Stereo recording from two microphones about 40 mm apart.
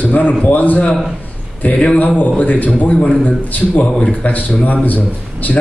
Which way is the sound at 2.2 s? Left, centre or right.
Left.